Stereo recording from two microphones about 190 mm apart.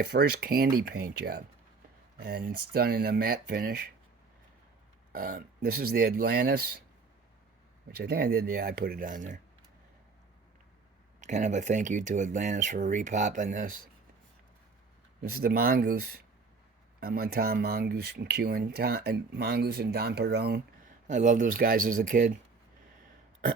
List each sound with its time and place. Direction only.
0.0 s speech: 55° right (ahead or behind)
5.1 s speech: 50° right (ahead or behind)
7.9 s speech: 55° right (ahead or behind)
11.2 s speech: 40° right (ahead or behind)
15.2 s speech: 50° right (ahead or behind)